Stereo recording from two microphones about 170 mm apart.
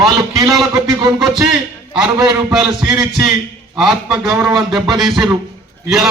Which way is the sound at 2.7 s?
25° right (ahead or behind).